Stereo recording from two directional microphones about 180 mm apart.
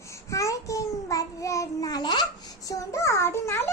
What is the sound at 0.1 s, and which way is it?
Child singing, 15° left (ahead or behind).